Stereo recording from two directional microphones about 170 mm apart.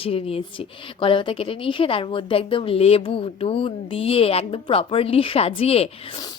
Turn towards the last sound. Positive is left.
turn(degrees=35)  # may be behind; listen again after turning